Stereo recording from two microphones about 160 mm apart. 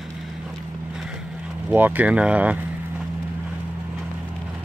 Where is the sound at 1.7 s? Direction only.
10° right (ahead or behind).